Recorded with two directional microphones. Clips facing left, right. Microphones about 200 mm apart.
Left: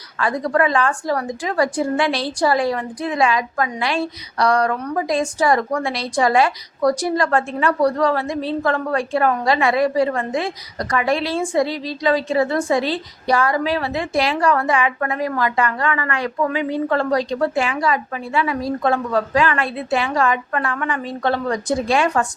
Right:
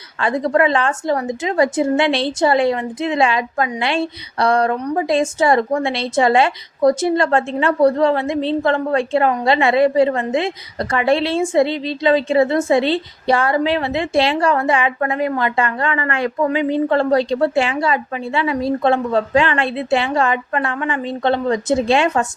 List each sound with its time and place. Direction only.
0.2 s a woman's voice: 25° right (ahead or behind)